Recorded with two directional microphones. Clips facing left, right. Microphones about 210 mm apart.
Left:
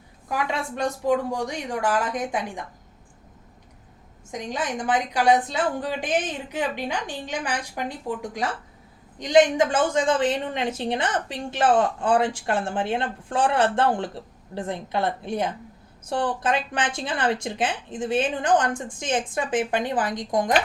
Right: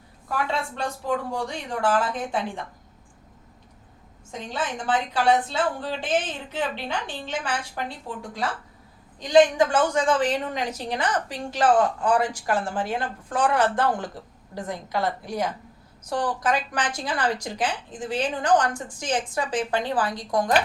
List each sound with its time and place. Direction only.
0.3 s a woman's voice: 15° left (ahead or behind)
4.3 s a woman's voice: 15° left (ahead or behind)